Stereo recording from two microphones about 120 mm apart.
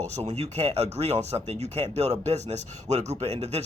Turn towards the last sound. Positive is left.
turn(degrees=-65)  # may be behind; listen again after turning